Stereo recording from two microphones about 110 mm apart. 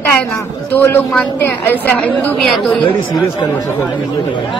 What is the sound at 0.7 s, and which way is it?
A man's voice, 20° left (ahead or behind).